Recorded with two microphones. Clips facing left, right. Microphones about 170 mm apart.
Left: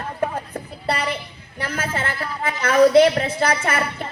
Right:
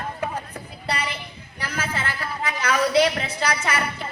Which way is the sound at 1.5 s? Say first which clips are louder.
Left 4 dB; 50° left (ahead or behind).